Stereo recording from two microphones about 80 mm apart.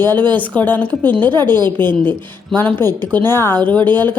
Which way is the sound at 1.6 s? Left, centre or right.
Left.